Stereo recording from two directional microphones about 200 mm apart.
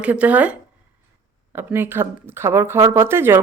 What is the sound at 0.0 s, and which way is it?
Speech, 5° right (ahead or behind).